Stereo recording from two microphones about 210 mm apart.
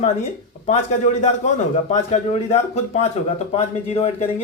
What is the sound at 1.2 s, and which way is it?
A man's voice, 35° left (ahead or behind).